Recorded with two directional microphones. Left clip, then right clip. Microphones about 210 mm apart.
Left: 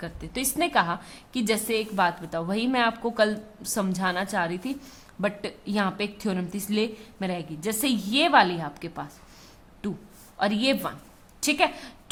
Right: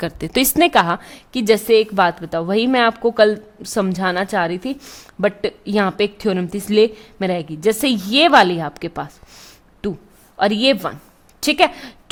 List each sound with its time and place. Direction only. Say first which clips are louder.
0.0 s a woman's voice: right 13 dB; 45° right (ahead or behind)